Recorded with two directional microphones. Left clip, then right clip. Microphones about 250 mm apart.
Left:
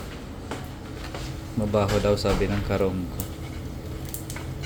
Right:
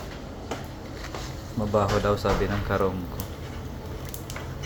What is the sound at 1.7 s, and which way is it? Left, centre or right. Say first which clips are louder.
Speech: left 1 dB; centre.